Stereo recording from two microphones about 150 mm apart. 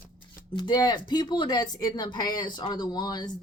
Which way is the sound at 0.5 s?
30° left (ahead or behind).